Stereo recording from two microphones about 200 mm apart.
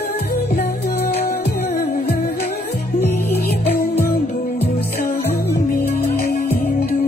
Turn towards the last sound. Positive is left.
turn(degrees=50)  # may be behind; listen again after turning